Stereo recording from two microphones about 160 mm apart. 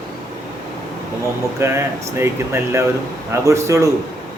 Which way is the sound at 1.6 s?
15° right (ahead or behind).